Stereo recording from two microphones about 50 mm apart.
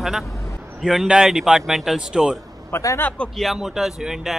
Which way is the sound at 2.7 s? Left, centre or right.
Left.